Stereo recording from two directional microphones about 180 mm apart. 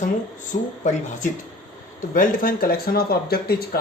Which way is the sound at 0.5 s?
45° left (ahead or behind).